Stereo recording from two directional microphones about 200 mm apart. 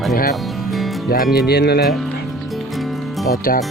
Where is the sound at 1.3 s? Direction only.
55° left (ahead or behind).